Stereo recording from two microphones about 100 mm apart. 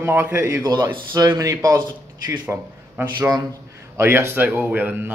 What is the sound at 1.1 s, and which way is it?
Speech, 40° right (ahead or behind).